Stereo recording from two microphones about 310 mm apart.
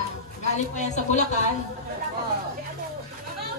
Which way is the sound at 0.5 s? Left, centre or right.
Left.